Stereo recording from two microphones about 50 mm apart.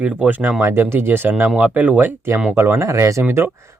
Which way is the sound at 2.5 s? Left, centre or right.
Right.